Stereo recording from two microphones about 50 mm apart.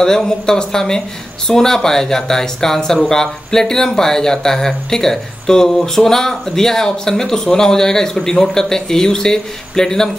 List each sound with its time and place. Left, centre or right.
0.0 s speech: centre